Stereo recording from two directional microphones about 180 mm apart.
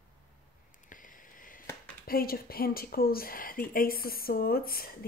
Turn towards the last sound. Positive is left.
turn(degrees=55)  # may be behind; listen again after turning